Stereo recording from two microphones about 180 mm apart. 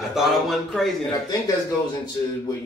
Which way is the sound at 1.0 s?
20° left (ahead or behind).